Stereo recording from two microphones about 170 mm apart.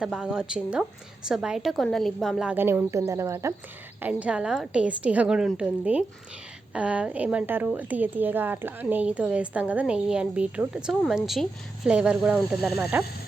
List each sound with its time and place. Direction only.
0.0 s a woman's voice: 5° right (ahead or behind)